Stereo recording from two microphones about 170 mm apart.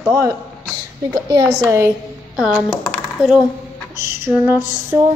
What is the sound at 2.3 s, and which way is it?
Speech, 5° right (ahead or behind).